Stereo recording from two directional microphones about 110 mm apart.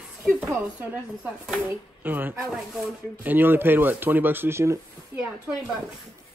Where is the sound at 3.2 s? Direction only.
15° right (ahead or behind).